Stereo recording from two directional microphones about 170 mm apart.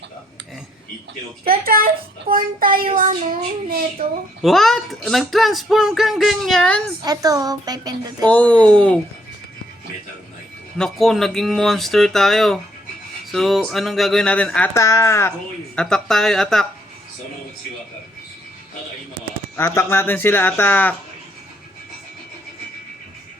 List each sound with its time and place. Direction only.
1.5 s child singing: 60° right (ahead or behind)
4.4 s speech: centre (ahead or behind)
7.0 s a woman's voice: 20° right (ahead or behind)
8.3 s speech: 10° left (ahead or behind)
10.8 s speech: centre (ahead or behind)
15.7 s speech: 5° left (ahead or behind)
19.5 s speech: 15° left (ahead or behind)